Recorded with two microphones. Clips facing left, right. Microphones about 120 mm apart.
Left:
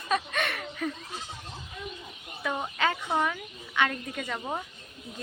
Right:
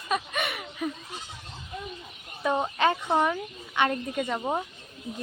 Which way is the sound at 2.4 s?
20° right (ahead or behind).